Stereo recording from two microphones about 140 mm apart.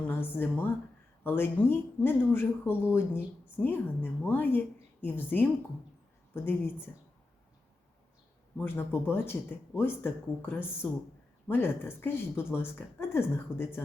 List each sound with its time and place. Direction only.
0.0 s a woman's voice: 15° left (ahead or behind)
8.5 s a woman's voice: 15° left (ahead or behind)